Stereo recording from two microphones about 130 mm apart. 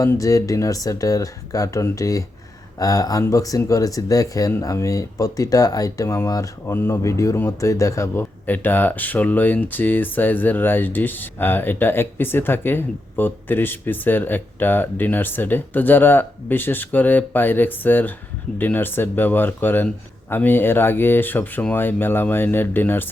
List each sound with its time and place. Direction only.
0.0 s speech: 25° left (ahead or behind)